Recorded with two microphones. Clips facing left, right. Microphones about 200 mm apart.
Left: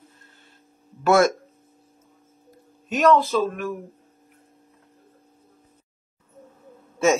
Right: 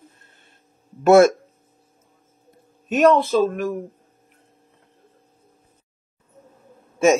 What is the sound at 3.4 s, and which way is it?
Speech, 35° right (ahead or behind).